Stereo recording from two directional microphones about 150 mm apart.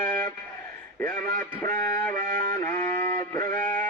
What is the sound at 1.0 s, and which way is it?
Music, 20° left (ahead or behind).